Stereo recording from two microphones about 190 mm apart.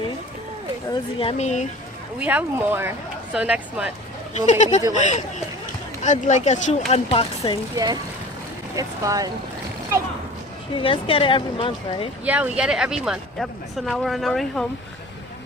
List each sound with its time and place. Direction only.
0.9 s speech: 30° left (ahead or behind)
2.1 s speech: 10° right (ahead or behind)
4.4 s speech: 40° left (ahead or behind)
8.7 s speech: 20° right (ahead or behind)
10.8 s speech: 30° left (ahead or behind)
12.2 s speech: 5° right (ahead or behind)